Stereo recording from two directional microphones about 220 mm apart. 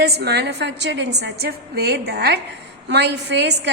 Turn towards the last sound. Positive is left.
turn(degrees=-50)  # may be behind; listen again after turning